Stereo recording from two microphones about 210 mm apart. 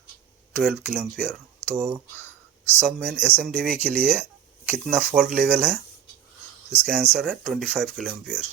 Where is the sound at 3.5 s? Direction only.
40° right (ahead or behind).